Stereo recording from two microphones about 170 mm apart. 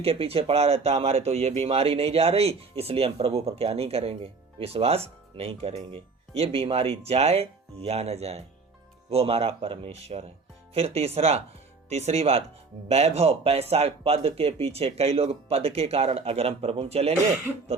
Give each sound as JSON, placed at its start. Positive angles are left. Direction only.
{"t": 0.0, "sound": "speech", "side_deg": -35}